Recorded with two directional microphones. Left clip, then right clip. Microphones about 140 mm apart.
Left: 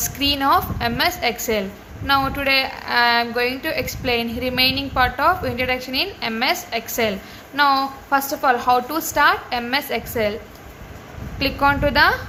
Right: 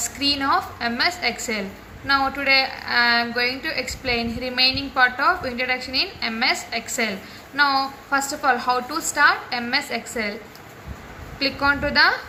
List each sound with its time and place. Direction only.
0.0 s a woman's voice: 90° left
11.3 s a woman's voice: 90° left